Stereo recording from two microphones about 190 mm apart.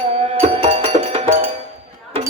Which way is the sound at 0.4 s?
30° right (ahead or behind).